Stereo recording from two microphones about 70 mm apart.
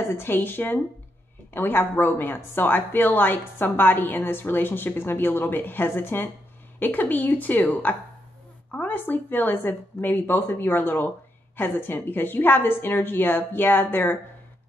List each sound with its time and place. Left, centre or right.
0.1 s a woman's voice: left